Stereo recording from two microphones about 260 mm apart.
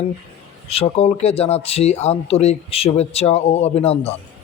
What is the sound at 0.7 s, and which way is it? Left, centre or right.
Speech, left.